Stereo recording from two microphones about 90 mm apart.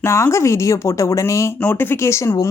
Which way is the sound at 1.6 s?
25° left (ahead or behind).